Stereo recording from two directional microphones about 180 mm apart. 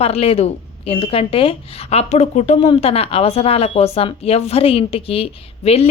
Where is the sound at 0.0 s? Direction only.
35° left (ahead or behind).